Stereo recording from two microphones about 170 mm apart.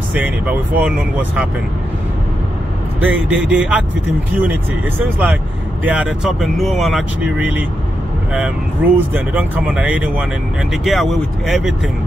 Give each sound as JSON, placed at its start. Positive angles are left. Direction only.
{"t": 0.1, "sound": "speech", "side_deg": -10}
{"t": 3.0, "sound": "speech", "side_deg": -10}
{"t": 4.9, "sound": "speech", "side_deg": -10}